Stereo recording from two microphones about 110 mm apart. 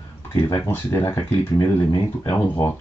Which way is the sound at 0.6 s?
25° left (ahead or behind).